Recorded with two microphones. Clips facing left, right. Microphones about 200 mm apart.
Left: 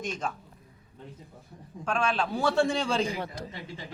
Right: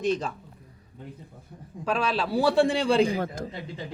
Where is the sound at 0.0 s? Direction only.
35° right (ahead or behind).